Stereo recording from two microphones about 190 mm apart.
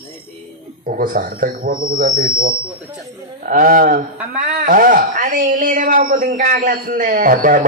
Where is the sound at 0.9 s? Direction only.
45° right (ahead or behind).